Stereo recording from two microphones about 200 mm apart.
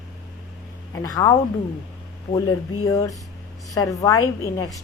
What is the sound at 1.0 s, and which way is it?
Speech, 15° left (ahead or behind).